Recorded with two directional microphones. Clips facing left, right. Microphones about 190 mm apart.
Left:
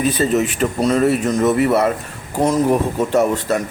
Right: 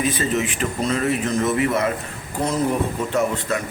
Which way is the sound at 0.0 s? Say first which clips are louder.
Left 5 dB; 40° left (ahead or behind).